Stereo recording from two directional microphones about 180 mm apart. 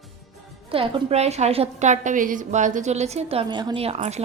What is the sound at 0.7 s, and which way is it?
A woman's voice, 30° right (ahead or behind).